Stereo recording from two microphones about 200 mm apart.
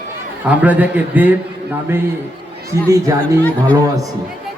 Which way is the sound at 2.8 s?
15° right (ahead or behind).